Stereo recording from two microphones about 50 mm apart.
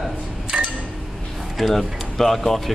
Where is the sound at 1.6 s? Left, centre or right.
Centre.